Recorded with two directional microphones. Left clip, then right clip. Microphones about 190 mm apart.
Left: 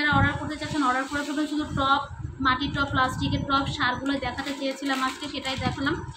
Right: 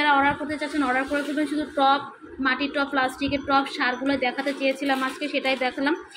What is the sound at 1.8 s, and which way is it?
A woman's voice, 15° right (ahead or behind).